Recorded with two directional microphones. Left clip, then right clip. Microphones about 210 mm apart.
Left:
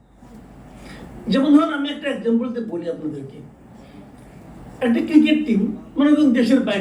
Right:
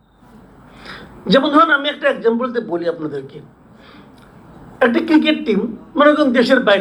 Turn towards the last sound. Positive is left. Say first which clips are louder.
# right 6 dB
turn(degrees=-40)  # may be behind; listen again after turning